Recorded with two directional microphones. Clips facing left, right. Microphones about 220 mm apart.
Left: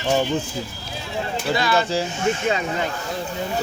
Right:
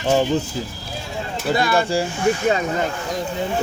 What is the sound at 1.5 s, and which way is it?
Speech, 50° right (ahead or behind).